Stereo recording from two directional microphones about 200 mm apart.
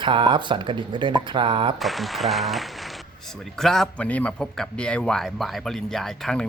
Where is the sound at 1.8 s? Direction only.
Centre (ahead or behind).